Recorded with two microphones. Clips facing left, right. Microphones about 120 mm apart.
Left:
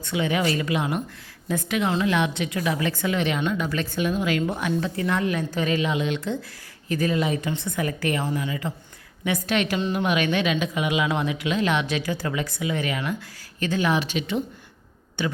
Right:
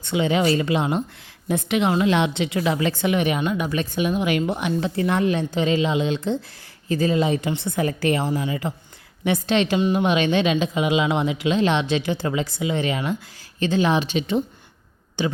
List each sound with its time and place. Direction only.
0.0 s speech: 30° right (ahead or behind)
3.1 s speech: 15° right (ahead or behind)
4.8 s a woman's voice: 30° right (ahead or behind)